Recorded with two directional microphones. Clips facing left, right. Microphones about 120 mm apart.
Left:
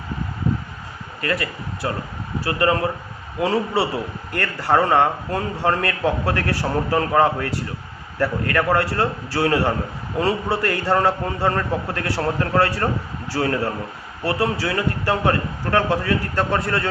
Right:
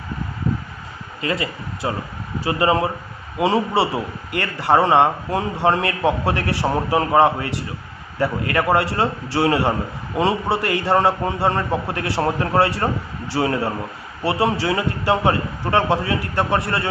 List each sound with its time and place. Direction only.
1.2 s a man's voice: 20° right (ahead or behind)